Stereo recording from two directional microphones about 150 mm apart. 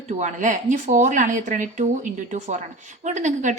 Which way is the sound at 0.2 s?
55° right (ahead or behind).